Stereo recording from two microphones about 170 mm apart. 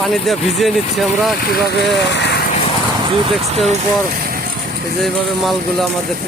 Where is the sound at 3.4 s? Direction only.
40° right (ahead or behind).